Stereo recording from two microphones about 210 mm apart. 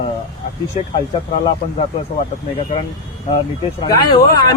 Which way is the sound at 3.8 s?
15° left (ahead or behind).